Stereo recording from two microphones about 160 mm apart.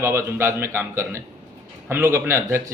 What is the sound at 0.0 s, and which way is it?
A man's voice, 15° right (ahead or behind).